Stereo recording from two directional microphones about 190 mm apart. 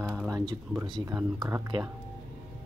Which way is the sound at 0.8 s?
20° right (ahead or behind).